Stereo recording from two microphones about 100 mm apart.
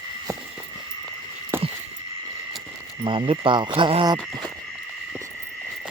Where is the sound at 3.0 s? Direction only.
65° right (ahead or behind).